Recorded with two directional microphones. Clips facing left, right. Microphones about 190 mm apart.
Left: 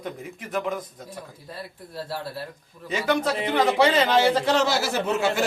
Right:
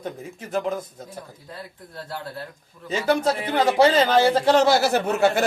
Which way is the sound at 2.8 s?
35° right (ahead or behind).